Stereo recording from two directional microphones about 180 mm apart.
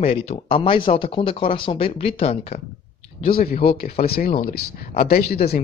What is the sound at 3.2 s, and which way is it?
Speech, 55° left (ahead or behind).